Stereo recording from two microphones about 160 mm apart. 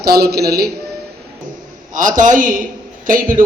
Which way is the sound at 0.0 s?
80° right.